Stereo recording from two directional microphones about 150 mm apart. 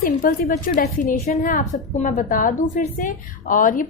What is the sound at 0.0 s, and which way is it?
A woman's voice, 65° left (ahead or behind).